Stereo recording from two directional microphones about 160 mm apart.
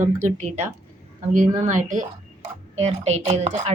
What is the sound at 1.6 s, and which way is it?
Speech, 50° right (ahead or behind).